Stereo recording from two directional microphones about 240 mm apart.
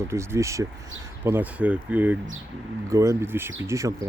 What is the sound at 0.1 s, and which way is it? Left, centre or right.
Speech, centre.